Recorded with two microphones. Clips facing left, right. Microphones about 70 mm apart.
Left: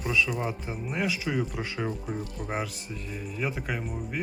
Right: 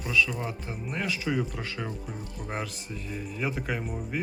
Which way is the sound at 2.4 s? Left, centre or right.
Centre.